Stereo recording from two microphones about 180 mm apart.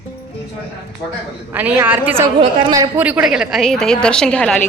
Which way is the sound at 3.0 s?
10° right (ahead or behind).